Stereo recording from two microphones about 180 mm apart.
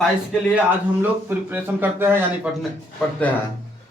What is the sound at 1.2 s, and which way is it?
A man's voice, 10° right (ahead or behind).